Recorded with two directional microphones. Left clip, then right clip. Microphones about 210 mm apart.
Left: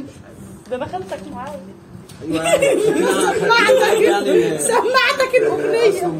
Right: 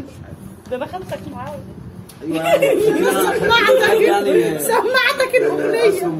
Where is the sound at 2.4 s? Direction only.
15° left (ahead or behind).